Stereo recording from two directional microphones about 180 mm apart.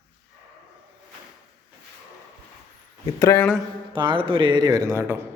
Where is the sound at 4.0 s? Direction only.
30° right (ahead or behind).